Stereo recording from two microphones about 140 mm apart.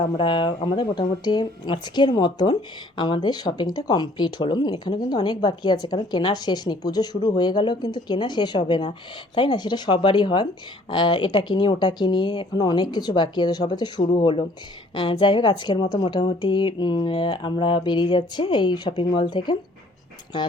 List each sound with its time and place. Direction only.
0.0 s speech: 40° left (ahead or behind)